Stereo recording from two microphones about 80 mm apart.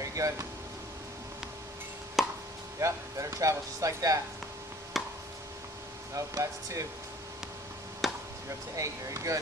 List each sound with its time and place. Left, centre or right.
0.0 s air conditioning: right
2.2 s chopping: centre
2.8 s speech: right
4.9 s chop: centre
6.1 s speech: right
8.0 s a sound: centre
8.7 s speech: right